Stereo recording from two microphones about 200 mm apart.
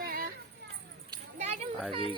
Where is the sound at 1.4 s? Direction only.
35° right (ahead or behind).